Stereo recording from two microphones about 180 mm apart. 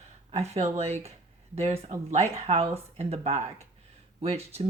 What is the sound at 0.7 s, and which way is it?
Speech, 35° right (ahead or behind).